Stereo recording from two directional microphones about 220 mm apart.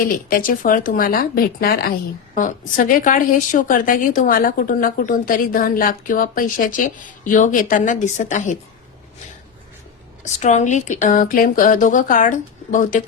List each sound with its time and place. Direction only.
0.0 s a woman's voice: 40° left (ahead or behind)
10.2 s a woman's voice: 30° left (ahead or behind)